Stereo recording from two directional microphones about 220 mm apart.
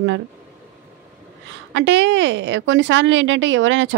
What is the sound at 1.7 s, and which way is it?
A woman's voice, 55° right (ahead or behind).